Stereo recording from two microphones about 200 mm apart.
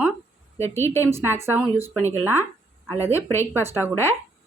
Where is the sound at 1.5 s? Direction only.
10° right (ahead or behind).